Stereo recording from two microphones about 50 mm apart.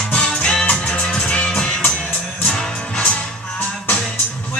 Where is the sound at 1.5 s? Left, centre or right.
Centre.